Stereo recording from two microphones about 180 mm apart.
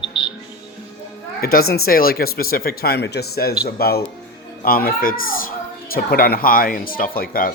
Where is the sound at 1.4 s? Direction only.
60° left (ahead or behind).